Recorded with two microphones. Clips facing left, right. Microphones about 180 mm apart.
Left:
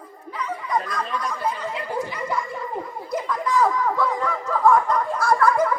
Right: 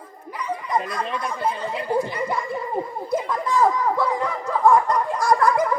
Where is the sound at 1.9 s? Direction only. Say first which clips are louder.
Right 6 dB; 30° right (ahead or behind).